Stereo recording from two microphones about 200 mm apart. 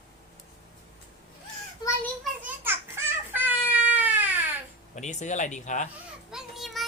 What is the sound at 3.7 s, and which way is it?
Cat, 10° right (ahead or behind).